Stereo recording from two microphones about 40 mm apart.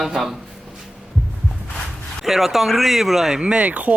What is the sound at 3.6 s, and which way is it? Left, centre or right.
Speech, right.